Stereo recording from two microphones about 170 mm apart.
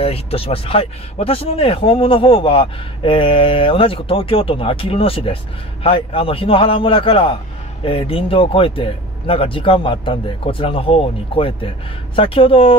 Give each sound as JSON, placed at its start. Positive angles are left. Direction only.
{"t": 0.0, "sound": "speech", "side_deg": 35}